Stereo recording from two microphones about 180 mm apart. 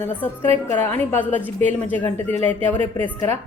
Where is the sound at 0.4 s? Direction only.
35° right (ahead or behind).